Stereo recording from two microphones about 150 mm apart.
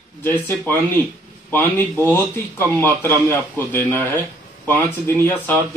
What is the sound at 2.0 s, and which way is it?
Speech, 15° left (ahead or behind).